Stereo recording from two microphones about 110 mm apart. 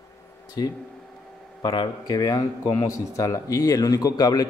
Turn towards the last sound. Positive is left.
turn(degrees=35)  # may be behind; listen again after turning